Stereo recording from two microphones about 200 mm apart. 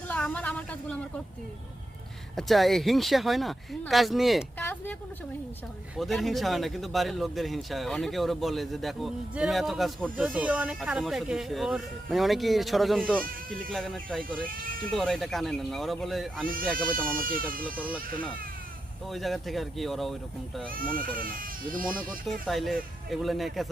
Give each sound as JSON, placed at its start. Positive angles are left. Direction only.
{"t": 0.1, "sound": "a sound", "side_deg": 5}
{"t": 2.3, "sound": "speech", "side_deg": 0}
{"t": 4.6, "sound": "a sound", "side_deg": 10}
{"t": 6.0, "sound": "speech", "side_deg": 0}
{"t": 17.2, "sound": "speech", "side_deg": -45}
{"t": 17.7, "sound": "speech", "side_deg": -5}
{"t": 19.1, "sound": "speech", "side_deg": 0}
{"t": 20.7, "sound": "speech", "side_deg": -45}
{"t": 22.3, "sound": "speech", "side_deg": 0}